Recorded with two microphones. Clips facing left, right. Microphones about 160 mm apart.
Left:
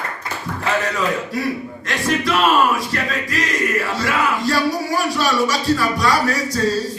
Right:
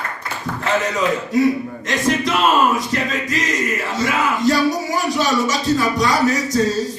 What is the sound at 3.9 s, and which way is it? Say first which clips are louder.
Speech: right 1 dB; 20° right (ahead or behind).